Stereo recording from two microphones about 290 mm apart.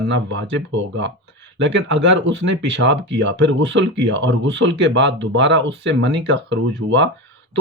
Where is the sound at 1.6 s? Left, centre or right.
Right.